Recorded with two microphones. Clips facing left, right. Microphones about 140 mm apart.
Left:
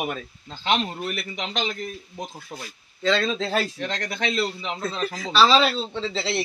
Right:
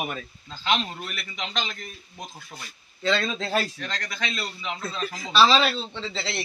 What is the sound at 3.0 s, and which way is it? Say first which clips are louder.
Speech: left 3 dB; 5° right (ahead or behind).